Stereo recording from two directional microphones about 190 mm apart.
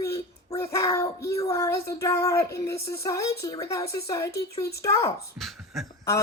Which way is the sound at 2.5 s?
15° left (ahead or behind).